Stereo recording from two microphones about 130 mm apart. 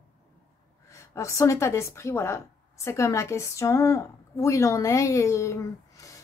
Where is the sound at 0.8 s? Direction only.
25° left (ahead or behind).